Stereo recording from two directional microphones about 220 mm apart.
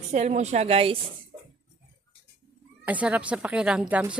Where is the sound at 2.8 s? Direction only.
5° right (ahead or behind).